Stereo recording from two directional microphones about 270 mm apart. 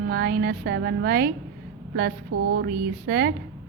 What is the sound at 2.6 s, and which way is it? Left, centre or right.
Speech, right.